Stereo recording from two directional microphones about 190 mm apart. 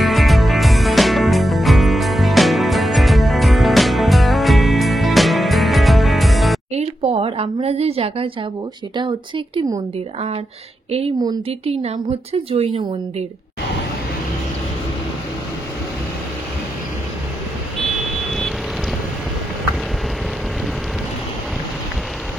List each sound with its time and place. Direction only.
0.0 s music: centre (ahead or behind)
6.7 s a sound: 35° right (ahead or behind)
10.9 s a woman's voice: 30° right (ahead or behind)
18.3 s vehicle: centre (ahead or behind)